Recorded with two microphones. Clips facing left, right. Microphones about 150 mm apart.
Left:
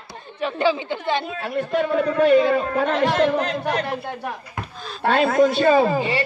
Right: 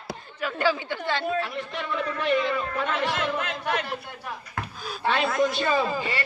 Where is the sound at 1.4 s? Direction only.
50° left (ahead or behind).